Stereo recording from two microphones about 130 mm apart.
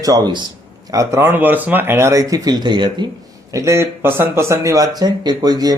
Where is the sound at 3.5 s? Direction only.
25° right (ahead or behind).